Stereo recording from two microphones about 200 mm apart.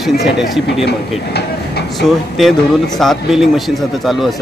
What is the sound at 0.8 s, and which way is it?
Speech, 55° left (ahead or behind).